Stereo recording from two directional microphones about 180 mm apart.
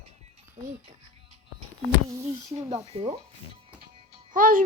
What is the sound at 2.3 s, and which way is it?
Speech, 35° right (ahead or behind).